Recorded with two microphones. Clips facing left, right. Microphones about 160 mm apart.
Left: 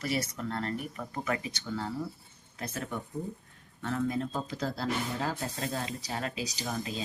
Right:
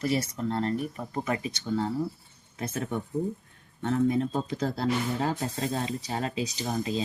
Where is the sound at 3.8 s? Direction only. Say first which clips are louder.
Right 6 dB; 25° right (ahead or behind).